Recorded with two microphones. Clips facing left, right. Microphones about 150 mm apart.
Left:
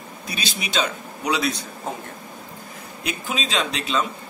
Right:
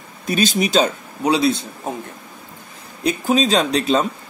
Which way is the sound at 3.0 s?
40° right (ahead or behind).